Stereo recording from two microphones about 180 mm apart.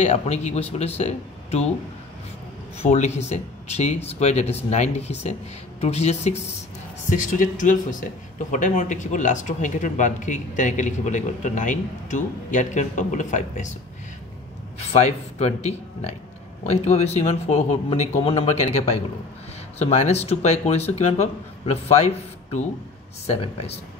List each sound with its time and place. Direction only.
0.0 s speech: 35° left (ahead or behind)
2.8 s speech: 40° left (ahead or behind)
14.8 s speech: 35° left (ahead or behind)